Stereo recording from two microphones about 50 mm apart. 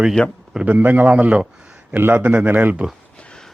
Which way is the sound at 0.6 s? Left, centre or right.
Right.